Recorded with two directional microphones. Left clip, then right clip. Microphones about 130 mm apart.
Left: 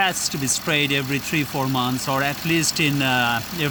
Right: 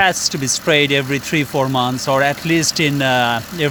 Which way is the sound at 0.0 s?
50° right (ahead or behind).